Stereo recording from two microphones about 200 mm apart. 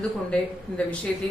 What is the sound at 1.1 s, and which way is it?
Speech, 5° left (ahead or behind).